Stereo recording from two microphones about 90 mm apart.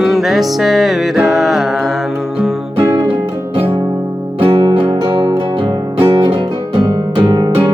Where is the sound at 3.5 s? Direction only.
70° right (ahead or behind).